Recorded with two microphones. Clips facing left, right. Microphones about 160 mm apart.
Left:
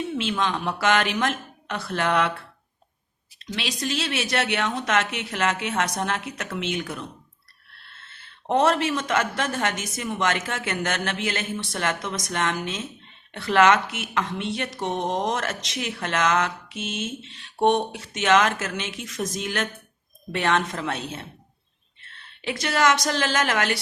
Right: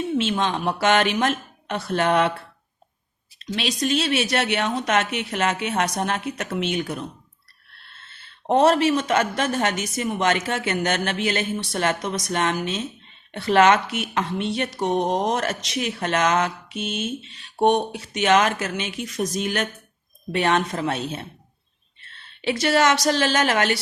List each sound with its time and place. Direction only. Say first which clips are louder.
0.3 s a woman's voice: right 2 dB; 20° right (ahead or behind)
3.8 s a woman's voice: right 6 dB; 20° right (ahead or behind)
8.4 s a woman's voice: right 4 dB; 20° right (ahead or behind)
22.4 s a woman's voice: right 4 dB; 25° right (ahead or behind)